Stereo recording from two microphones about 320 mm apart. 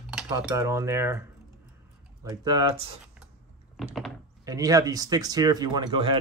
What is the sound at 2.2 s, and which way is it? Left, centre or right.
Speech, centre.